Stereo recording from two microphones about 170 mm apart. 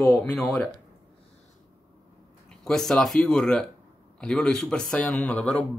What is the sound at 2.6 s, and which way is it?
Speech, 5° left (ahead or behind).